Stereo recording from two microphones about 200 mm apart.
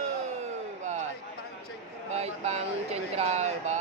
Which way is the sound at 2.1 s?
35° right (ahead or behind).